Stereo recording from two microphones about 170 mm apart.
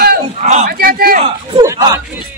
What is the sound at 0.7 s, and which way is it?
Speech, 60° right (ahead or behind).